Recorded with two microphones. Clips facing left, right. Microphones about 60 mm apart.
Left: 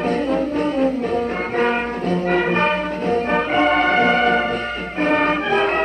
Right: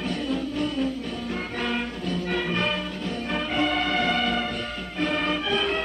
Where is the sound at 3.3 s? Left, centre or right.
Left.